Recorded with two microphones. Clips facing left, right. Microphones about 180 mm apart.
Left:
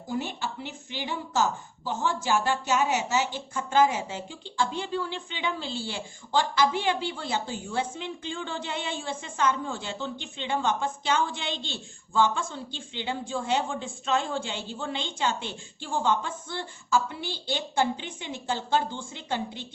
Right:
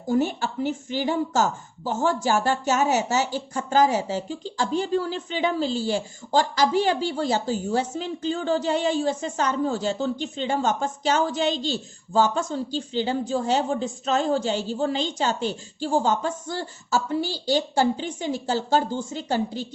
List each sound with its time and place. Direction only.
0.1 s a woman's voice: 45° right (ahead or behind)